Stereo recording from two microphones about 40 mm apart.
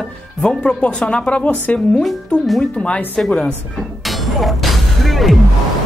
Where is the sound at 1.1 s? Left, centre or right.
Left.